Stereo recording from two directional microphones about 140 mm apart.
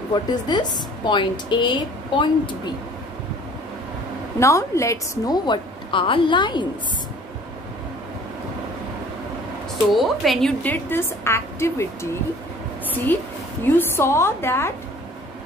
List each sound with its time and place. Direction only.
0.1 s a woman's voice: 30° left (ahead or behind)
4.4 s a woman's voice: 20° left (ahead or behind)
9.9 s a woman's voice: centre (ahead or behind)
10.6 s a woman's voice: 15° left (ahead or behind)
13.7 s a woman's voice: 15° left (ahead or behind)